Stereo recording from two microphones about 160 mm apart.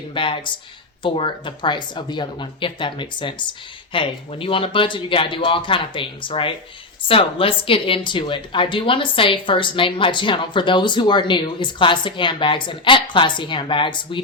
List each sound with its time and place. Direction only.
0.1 s speech: 30° left (ahead or behind)